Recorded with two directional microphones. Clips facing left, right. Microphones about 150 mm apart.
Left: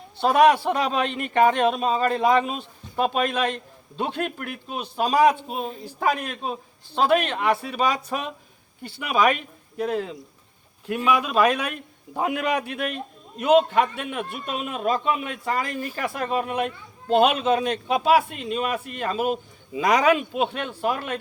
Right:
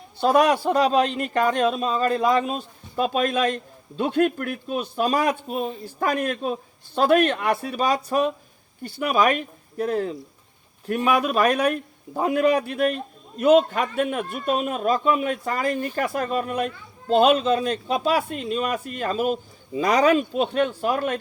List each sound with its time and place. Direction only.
0.3 s a man's voice: 40° right (ahead or behind)